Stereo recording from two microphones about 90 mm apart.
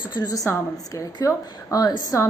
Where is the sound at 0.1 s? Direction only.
55° left (ahead or behind).